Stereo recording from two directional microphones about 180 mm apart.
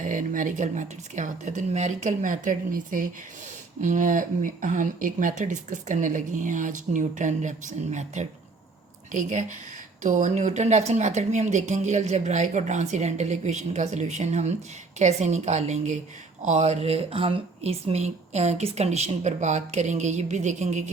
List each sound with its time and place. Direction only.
0.0 s speech: 45° right (ahead or behind)